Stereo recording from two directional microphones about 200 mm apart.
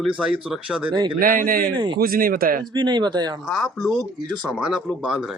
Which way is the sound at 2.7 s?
20° right (ahead or behind).